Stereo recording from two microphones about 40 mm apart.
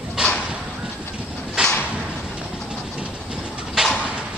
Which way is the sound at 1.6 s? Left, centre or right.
Right.